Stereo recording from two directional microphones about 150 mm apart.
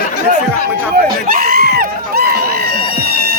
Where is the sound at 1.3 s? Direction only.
85° right.